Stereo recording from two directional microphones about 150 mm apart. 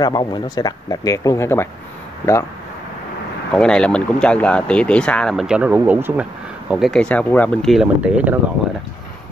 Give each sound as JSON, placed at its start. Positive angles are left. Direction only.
{"t": 0.0, "sound": "speech", "side_deg": 30}
{"t": 3.5, "sound": "speech", "side_deg": 5}
{"t": 6.7, "sound": "speech", "side_deg": 0}
{"t": 7.7, "sound": "speech", "side_deg": -5}